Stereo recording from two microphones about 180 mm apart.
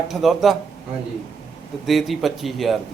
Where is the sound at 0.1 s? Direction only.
Centre (ahead or behind).